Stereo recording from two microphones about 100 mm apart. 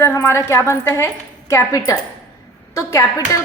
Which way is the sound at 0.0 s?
30° left (ahead or behind).